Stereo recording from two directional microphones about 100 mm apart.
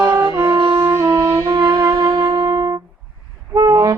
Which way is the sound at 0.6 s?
60° right (ahead or behind).